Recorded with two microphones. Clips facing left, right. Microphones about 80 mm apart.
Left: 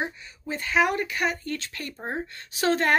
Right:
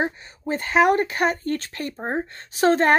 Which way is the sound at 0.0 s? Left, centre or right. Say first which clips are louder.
Right 6 dB; right.